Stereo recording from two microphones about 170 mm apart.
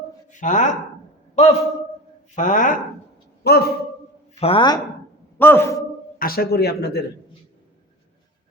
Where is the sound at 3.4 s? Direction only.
70° left (ahead or behind).